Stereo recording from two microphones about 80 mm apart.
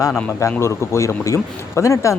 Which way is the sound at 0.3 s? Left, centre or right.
Left.